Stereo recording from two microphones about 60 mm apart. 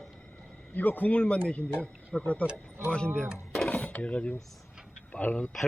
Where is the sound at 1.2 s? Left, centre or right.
Centre.